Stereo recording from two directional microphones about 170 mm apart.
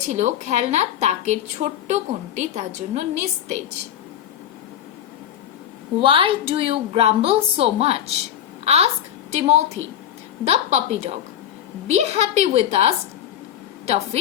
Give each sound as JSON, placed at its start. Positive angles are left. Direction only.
{"t": 0.1, "sound": "a woman's voice", "side_deg": -45}
{"t": 6.0, "sound": "a woman's voice", "side_deg": -30}